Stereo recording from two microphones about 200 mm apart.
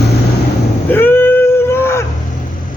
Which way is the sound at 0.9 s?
10° left (ahead or behind).